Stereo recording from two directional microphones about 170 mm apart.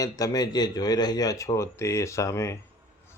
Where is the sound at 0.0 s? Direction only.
20° left (ahead or behind).